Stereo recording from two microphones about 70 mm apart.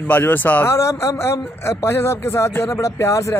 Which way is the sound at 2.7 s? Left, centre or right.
Left.